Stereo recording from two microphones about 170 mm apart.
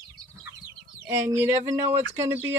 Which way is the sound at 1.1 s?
15° right (ahead or behind).